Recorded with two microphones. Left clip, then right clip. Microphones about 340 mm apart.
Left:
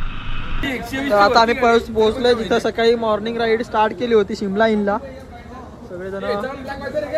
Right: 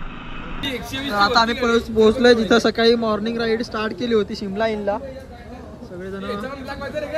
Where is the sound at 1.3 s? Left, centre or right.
Centre.